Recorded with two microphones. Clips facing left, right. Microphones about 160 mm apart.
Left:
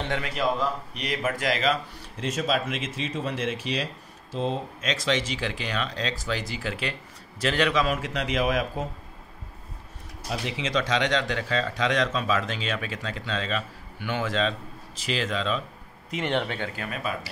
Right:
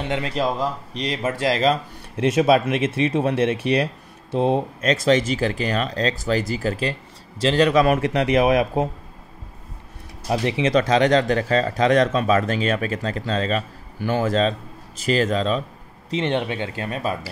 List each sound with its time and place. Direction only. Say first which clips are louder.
0.2 s speech: right 3 dB; 35° right (ahead or behind)
2.1 s speech: right 10 dB; 70° right (ahead or behind); by 7.7 s 30° right (ahead or behind)
7.7 s speech: right 8 dB; 60° right (ahead or behind)
10.3 s speech: right 9 dB; 60° right (ahead or behind); by 15.6 s 40° right (ahead or behind)
16.1 s speech: right 5 dB; 20° right (ahead or behind)